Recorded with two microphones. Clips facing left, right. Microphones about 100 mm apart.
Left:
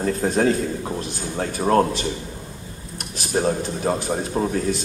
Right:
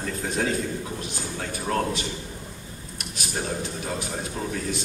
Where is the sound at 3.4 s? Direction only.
35° left (ahead or behind).